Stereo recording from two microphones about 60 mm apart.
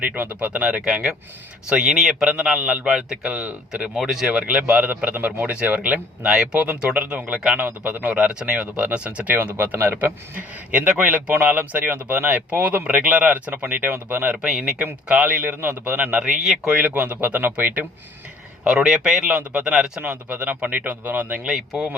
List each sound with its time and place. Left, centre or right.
0.0 s speech: right; by 2.3 s centre
2.3 s speech: right
3.9 s speech: centre
4.3 s speech: right
9.4 s a man's voice: right
14.4 s speech: centre
15.1 s a man's voice: right
16.3 s speech: centre
16.9 s a man's voice: right
18.9 s speech: centre
19.2 s speech: right
20.0 s speech: right
21.4 s speech: centre